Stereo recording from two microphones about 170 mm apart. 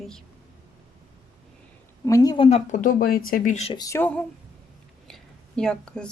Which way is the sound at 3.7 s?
20° left (ahead or behind).